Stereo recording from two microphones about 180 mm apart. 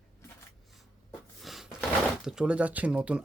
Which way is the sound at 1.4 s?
Centre (ahead or behind).